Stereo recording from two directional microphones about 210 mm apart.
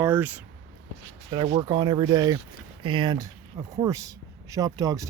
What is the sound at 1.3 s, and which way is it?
Speech, 20° right (ahead or behind).